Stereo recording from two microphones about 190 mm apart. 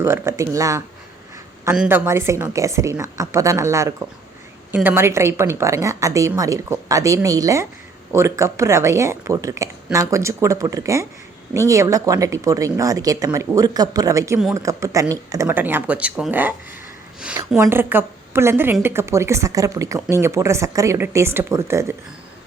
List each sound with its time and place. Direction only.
0.0 s a woman's voice: 15° right (ahead or behind)